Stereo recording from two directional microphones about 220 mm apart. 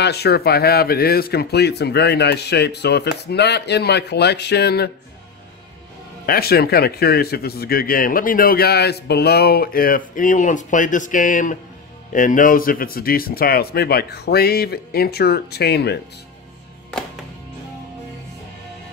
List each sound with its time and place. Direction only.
0.0 s a man's voice: 50° left (ahead or behind)
6.2 s a man's voice: 45° left (ahead or behind)